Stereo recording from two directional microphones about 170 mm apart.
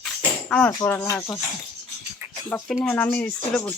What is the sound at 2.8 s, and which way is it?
Speech, 10° left (ahead or behind).